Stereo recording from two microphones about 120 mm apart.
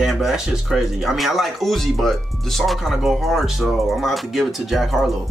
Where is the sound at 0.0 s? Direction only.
Centre (ahead or behind).